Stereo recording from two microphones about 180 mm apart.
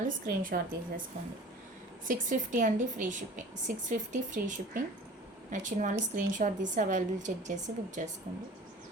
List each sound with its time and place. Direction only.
0.0 s a woman's voice: 50° right (ahead or behind)
2.0 s a woman's voice: 45° right (ahead or behind)